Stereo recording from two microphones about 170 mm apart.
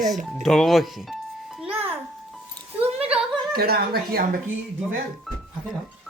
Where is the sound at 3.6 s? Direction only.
65° right (ahead or behind).